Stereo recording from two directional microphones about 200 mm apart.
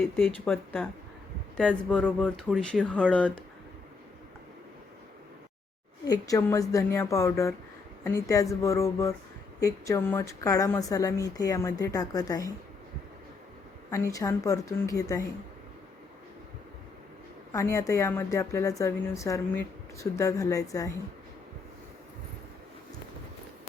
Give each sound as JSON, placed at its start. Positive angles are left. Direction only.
{"t": 0.2, "sound": "speech", "side_deg": 5}
{"t": 6.1, "sound": "a woman's voice", "side_deg": 15}
{"t": 13.9, "sound": "a woman's voice", "side_deg": 15}
{"t": 17.5, "sound": "a woman's voice", "side_deg": 15}